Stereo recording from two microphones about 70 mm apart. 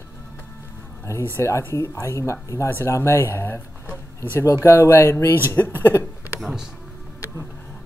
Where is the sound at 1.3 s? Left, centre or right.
Left.